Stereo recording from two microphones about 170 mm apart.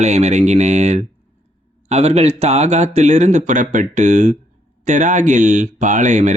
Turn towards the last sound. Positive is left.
turn(degrees=-45)  # may be behind; listen again after turning